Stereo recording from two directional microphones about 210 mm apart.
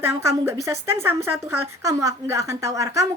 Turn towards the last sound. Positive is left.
turn(degrees=-15)  # may be behind; listen again after turning